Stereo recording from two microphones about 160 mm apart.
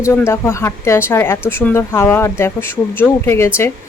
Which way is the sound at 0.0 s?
15° left (ahead or behind).